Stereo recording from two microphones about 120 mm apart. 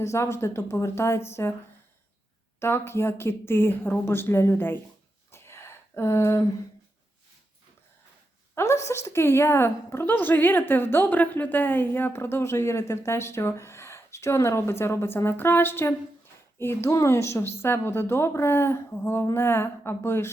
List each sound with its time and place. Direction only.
0.0 s a woman's voice: 25° left (ahead or behind)
2.6 s a woman's voice: 20° left (ahead or behind)
5.3 s a sound: 20° left (ahead or behind)
8.5 s a woman's voice: 25° left (ahead or behind)